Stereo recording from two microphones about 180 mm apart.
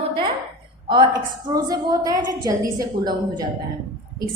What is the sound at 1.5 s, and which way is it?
A woman's voice, 20° right (ahead or behind).